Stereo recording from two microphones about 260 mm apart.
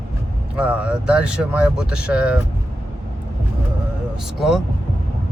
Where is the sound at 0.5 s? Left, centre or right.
Centre.